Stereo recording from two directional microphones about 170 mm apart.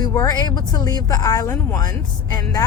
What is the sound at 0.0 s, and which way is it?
Speech, 20° left (ahead or behind).